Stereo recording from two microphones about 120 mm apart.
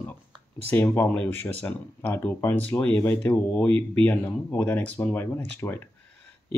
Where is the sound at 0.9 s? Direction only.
15° left (ahead or behind).